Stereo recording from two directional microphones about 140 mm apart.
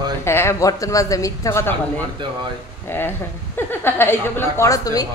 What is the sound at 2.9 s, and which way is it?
A woman's voice, 15° left (ahead or behind).